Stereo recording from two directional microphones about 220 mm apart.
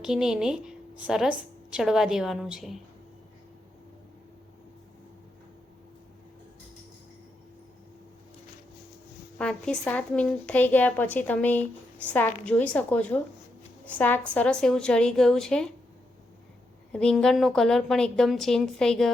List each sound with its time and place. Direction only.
0.0 s a woman's voice: 5° right (ahead or behind)
9.4 s a woman's voice: 5° left (ahead or behind)
16.9 s a woman's voice: 5° left (ahead or behind)